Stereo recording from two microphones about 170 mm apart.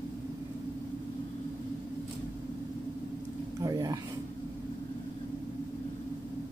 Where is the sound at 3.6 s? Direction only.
20° right (ahead or behind).